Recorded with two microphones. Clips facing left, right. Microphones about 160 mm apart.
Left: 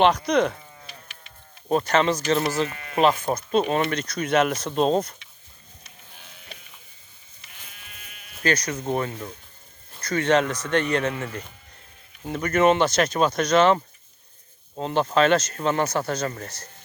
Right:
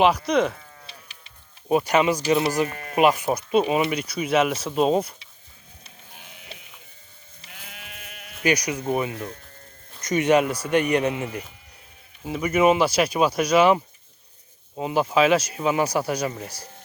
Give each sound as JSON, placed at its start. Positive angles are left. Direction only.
{"t": 0.0, "sound": "speech", "side_deg": -5}
{"t": 2.6, "sound": "speech", "side_deg": -40}
{"t": 2.9, "sound": "speech", "side_deg": -10}
{"t": 7.5, "sound": "sheep", "side_deg": -75}
{"t": 8.4, "sound": "speech", "side_deg": -15}